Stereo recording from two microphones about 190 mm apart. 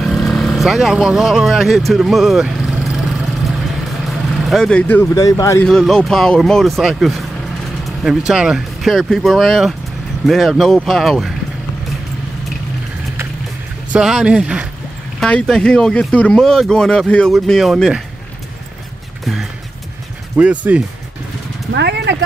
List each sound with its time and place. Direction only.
0.0 s speech: centre (ahead or behind)
1.9 s vehicle: centre (ahead or behind)
4.1 s speech: centre (ahead or behind); by 5.7 s 15° left (ahead or behind)
5.7 s speech: centre (ahead or behind)
13.9 s speech: 5° right (ahead or behind)
20.3 s speech: 10° right (ahead or behind)
21.7 s vehicle: 60° right (ahead or behind)